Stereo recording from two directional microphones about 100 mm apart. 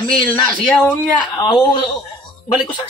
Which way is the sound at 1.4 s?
55° left (ahead or behind).